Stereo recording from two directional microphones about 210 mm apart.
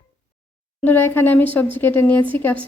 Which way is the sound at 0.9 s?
10° left (ahead or behind).